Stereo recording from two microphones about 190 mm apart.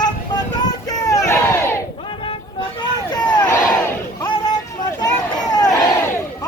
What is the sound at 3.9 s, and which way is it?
Crowd, 20° left (ahead or behind).